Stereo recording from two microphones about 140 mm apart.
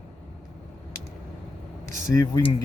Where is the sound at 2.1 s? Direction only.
25° left (ahead or behind).